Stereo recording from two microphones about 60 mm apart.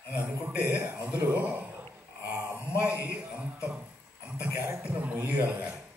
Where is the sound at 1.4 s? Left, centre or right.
Right.